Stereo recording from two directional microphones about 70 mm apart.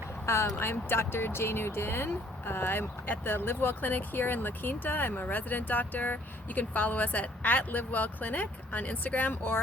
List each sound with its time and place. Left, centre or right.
0.3 s speech: left